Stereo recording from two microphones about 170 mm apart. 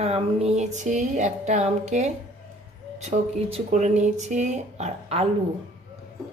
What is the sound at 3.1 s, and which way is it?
Speech, 45° right (ahead or behind).